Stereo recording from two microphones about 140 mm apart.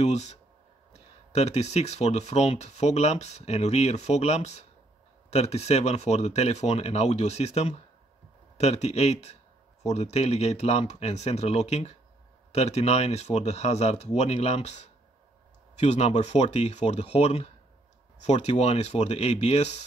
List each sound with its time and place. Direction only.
0.0 s speech: 55° left (ahead or behind)